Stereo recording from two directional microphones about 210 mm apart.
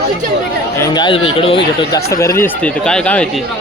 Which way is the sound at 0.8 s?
20° left (ahead or behind).